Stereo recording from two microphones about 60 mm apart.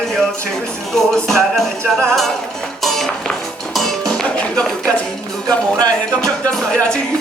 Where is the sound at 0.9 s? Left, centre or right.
Centre.